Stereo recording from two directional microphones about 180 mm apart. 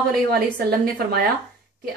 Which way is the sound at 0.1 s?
55° right (ahead or behind).